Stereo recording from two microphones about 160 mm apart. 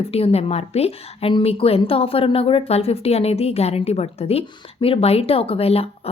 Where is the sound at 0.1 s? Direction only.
40° left (ahead or behind).